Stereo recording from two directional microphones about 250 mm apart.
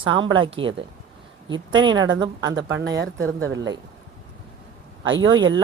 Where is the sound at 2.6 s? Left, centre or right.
Right.